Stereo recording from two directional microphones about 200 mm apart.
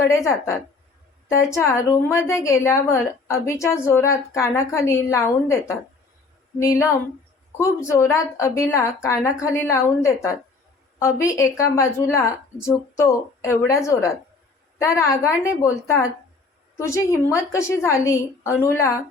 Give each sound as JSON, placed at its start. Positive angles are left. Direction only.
{"t": 0.0, "sound": "a woman's voice", "side_deg": 15}
{"t": 11.3, "sound": "a woman's voice", "side_deg": 15}